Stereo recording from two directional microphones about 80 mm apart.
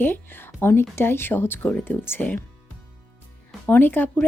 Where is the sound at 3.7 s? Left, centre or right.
Left.